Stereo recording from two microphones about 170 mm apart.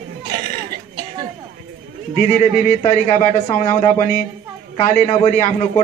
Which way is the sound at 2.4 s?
40° left (ahead or behind).